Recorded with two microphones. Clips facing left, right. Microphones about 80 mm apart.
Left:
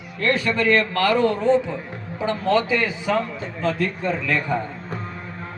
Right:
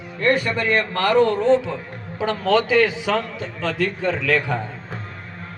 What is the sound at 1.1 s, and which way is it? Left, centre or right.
Speech, right.